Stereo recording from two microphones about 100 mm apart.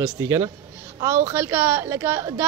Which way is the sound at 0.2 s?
30° right (ahead or behind).